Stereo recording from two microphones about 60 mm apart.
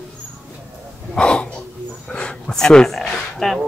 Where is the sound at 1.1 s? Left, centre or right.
Centre.